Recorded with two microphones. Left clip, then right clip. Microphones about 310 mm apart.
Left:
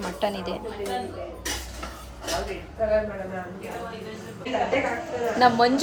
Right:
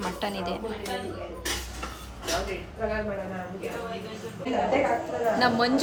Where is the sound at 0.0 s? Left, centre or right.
Centre.